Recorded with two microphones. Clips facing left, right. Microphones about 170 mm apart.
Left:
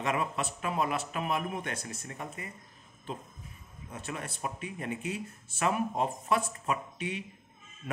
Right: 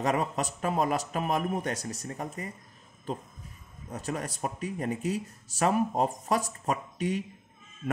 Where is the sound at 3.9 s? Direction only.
40° right (ahead or behind).